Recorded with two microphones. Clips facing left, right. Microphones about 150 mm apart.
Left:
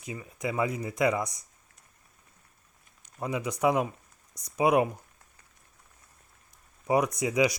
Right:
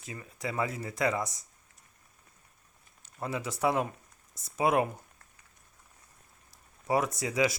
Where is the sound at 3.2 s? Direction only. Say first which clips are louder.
Left 3 dB; 15° left (ahead or behind).